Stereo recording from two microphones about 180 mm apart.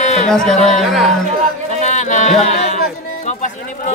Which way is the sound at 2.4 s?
40° left (ahead or behind).